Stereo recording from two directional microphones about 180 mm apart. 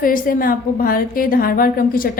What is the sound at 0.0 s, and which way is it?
A woman's voice, 50° left (ahead or behind).